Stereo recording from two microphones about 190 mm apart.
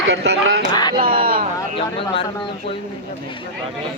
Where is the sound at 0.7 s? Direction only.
25° left (ahead or behind).